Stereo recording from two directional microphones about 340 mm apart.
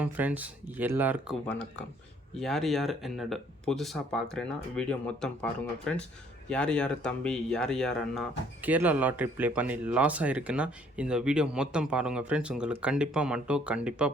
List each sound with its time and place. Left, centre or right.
0.0 s speech: centre